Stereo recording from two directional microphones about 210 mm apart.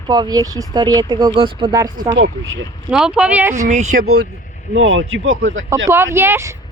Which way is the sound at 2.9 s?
5° right (ahead or behind).